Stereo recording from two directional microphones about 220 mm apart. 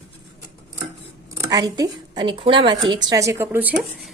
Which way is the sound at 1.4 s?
15° right (ahead or behind).